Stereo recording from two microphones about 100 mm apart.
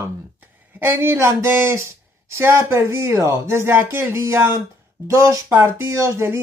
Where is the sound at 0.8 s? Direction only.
25° right (ahead or behind).